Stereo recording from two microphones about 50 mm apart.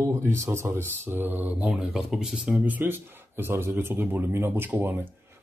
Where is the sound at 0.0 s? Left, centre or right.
Right.